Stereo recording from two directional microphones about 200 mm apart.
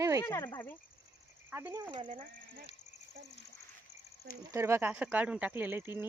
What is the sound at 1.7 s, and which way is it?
Speech, 20° right (ahead or behind).